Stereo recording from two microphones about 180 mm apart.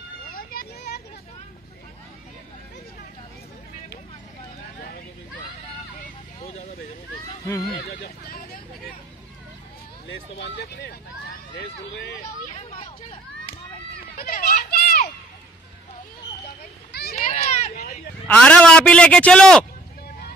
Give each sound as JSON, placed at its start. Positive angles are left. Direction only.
{"t": 0.4, "sound": "vehicle", "side_deg": 55}
{"t": 7.7, "sound": "speech", "side_deg": 65}
{"t": 10.0, "sound": "speech", "side_deg": 70}
{"t": 12.5, "sound": "speech", "side_deg": 30}
{"t": 14.1, "sound": "children playing", "side_deg": 50}
{"t": 17.1, "sound": "a sound", "side_deg": 40}
{"t": 18.2, "sound": "a man's voice", "side_deg": 5}